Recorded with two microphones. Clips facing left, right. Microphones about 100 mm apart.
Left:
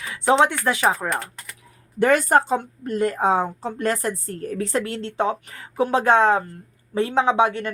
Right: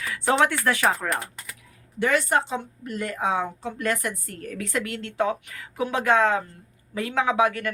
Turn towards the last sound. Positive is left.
turn(degrees=30)  # may be behind; listen again after turning